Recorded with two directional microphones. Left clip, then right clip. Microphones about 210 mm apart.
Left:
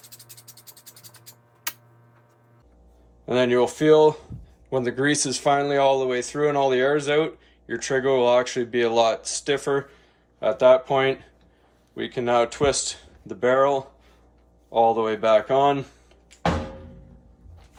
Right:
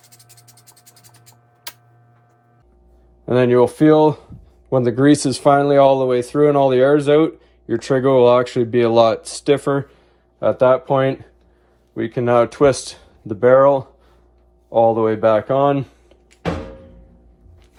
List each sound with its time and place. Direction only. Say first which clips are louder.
3.2 s speech: right 6 dB; 25° right (ahead or behind)